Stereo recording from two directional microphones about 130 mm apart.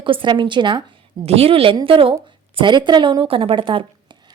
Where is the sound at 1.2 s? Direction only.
50° right (ahead or behind).